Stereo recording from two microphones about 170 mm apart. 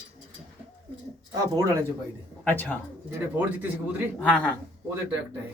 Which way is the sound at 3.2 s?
10° right (ahead or behind).